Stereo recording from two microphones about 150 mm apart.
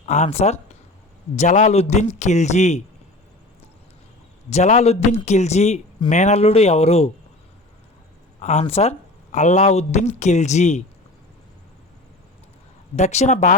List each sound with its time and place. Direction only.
0.0 s speech: 50° left (ahead or behind)
4.4 s speech: 50° left (ahead or behind)
8.4 s speech: 45° left (ahead or behind)
13.0 s speech: 50° left (ahead or behind)